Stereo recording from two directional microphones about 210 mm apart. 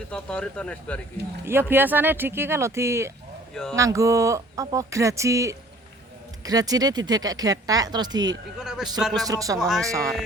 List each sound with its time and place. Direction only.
0.1 s speech: 5° left (ahead or behind)
1.5 s speech: 10° right (ahead or behind)
3.5 s speech: 5° left (ahead or behind)
3.8 s speech: 15° right (ahead or behind)
8.5 s speech: centre (ahead or behind)
9.2 s speech: 15° right (ahead or behind)
9.6 s speech: centre (ahead or behind)